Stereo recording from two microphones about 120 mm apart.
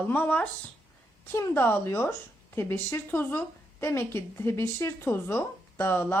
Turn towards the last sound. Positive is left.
turn(degrees=20)  # may be behind; listen again after turning